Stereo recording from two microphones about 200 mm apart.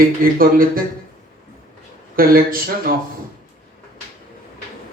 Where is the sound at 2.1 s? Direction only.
45° right (ahead or behind).